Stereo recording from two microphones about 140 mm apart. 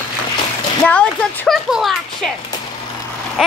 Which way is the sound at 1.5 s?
Centre (ahead or behind).